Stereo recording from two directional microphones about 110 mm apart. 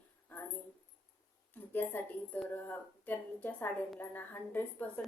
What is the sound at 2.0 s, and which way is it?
Speech, 20° left (ahead or behind).